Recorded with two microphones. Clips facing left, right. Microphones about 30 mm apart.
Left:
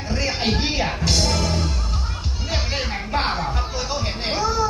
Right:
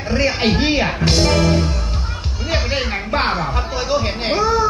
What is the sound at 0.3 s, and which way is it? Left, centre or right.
Speech, right.